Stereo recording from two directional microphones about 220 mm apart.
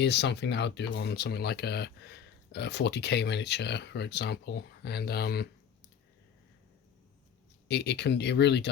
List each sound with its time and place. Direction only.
0.0 s speech: 50° left (ahead or behind)
7.7 s speech: 50° left (ahead or behind)